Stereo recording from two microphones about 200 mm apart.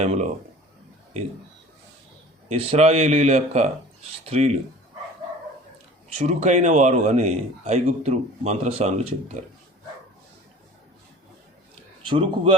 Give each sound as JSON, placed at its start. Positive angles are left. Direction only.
{"t": 0.0, "sound": "a man's voice", "side_deg": -35}
{"t": 2.5, "sound": "a man's voice", "side_deg": -30}
{"t": 6.1, "sound": "a man's voice", "side_deg": -35}
{"t": 11.7, "sound": "a sound", "side_deg": -30}